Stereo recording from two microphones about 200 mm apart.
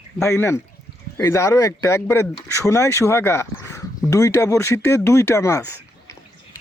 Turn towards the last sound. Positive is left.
turn(degrees=15)  # may be behind; listen again after turning